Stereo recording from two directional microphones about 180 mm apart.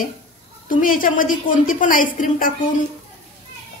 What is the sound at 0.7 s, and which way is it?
A woman's voice, 50° left (ahead or behind).